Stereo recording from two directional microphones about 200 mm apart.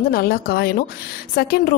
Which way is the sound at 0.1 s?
50° left (ahead or behind).